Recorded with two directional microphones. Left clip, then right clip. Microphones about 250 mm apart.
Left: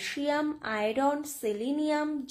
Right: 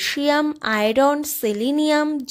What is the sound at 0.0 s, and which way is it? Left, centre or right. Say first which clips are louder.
Speech: right 10 dB; right.